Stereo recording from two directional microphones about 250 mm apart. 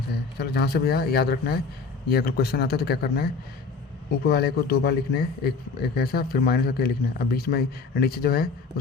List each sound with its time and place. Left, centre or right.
0.3 s a man's voice: left
4.3 s a man's voice: left